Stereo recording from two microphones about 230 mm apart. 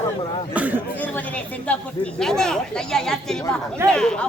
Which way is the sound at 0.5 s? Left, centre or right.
Centre.